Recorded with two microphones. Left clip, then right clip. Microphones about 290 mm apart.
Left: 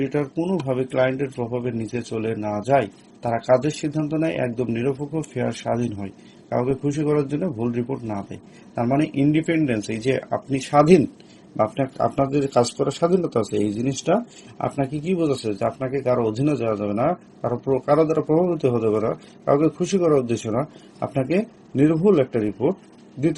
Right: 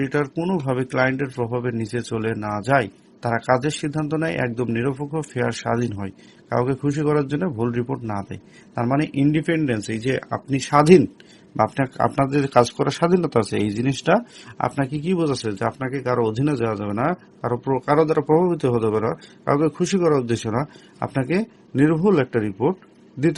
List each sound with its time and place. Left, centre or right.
0.1 s a man's voice: right